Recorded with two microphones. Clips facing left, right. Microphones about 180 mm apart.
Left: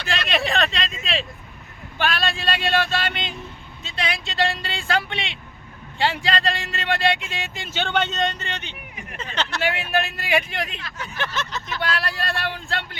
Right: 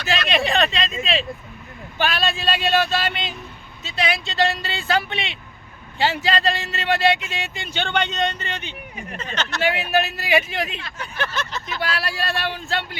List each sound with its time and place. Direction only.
0.3 s a sound: centre (ahead or behind)
2.0 s speech: centre (ahead or behind)
10.8 s speech: 25° right (ahead or behind)
11.2 s speech: 20° left (ahead or behind)
11.8 s speech: 5° right (ahead or behind)